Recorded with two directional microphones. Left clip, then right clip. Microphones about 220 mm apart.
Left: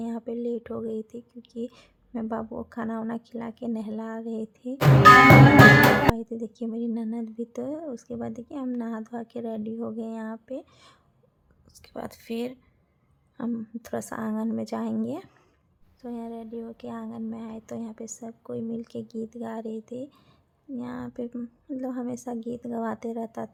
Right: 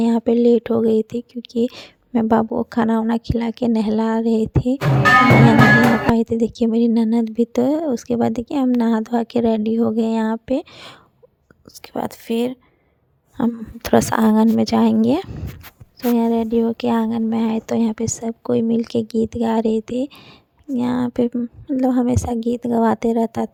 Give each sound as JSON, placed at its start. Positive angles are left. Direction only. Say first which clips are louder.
{"t": 0.0, "sound": "speech", "louder": "right 16 dB", "side_deg": -40}
{"t": 6.1, "sound": "speech", "louder": "right 15 dB", "side_deg": -35}